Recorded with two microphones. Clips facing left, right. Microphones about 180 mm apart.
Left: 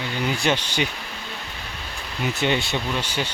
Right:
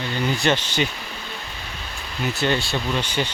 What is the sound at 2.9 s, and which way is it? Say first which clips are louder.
Speech: right 2 dB; 5° left (ahead or behind).